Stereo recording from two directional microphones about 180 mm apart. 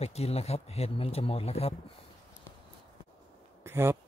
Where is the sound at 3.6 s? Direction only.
15° right (ahead or behind).